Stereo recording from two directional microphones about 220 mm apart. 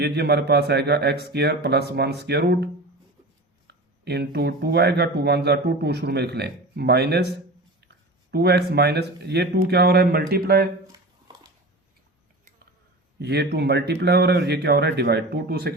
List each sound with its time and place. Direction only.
0.0 s speech: 50° right (ahead or behind)
3.7 s speech: 50° right (ahead or behind)
8.3 s speech: 50° right (ahead or behind)
13.1 s speech: 50° right (ahead or behind)